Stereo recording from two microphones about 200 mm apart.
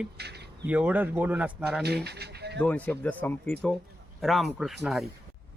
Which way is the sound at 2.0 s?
55° right (ahead or behind).